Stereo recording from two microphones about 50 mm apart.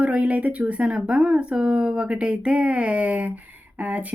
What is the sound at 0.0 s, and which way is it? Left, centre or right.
Speech, right.